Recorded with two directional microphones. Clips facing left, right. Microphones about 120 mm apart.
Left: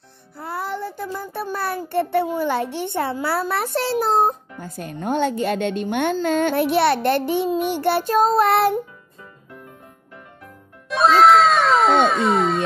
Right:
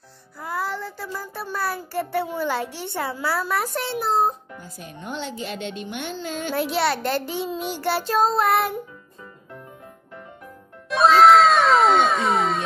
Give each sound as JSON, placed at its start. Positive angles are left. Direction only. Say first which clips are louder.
{"t": 0.4, "sound": "music", "louder": "left 1 dB", "side_deg": 25}
{"t": 0.9, "sound": "a child's voice", "louder": "left 4 dB", "side_deg": 20}
{"t": 1.3, "sound": "a woman's voice", "louder": "left 4 dB", "side_deg": 55}
{"t": 2.0, "sound": "a child's voice", "louder": "left 6 dB", "side_deg": 25}
{"t": 2.6, "sound": "a woman's voice", "louder": "left 5 dB", "side_deg": 55}
{"t": 3.0, "sound": "a child's voice", "louder": "left 2 dB", "side_deg": 25}
{"t": 4.6, "sound": "a woman's voice", "louder": "left 10 dB", "side_deg": 50}
{"t": 10.9, "sound": "cat", "louder": "even", "side_deg": 0}